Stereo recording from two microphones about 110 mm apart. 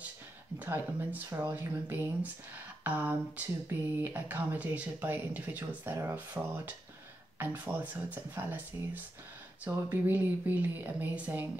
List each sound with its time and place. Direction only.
0.6 s speech: 15° right (ahead or behind)